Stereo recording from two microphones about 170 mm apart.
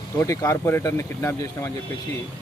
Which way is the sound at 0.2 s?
15° left (ahead or behind).